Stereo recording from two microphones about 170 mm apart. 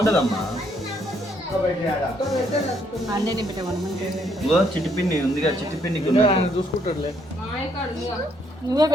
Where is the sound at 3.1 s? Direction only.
25° right (ahead or behind).